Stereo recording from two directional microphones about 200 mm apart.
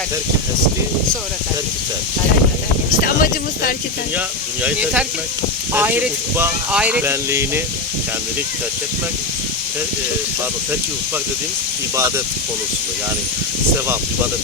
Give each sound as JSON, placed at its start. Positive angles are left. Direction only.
{"t": 3.2, "sound": "speech", "side_deg": 45}
{"t": 4.6, "sound": "speech", "side_deg": -5}
{"t": 11.9, "sound": "speech", "side_deg": -15}